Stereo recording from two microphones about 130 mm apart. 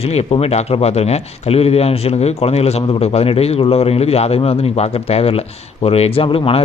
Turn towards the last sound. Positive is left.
turn(degrees=45)  # may be behind; listen again after turning